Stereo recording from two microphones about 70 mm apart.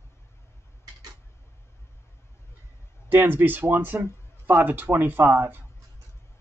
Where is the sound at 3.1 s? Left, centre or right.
Right.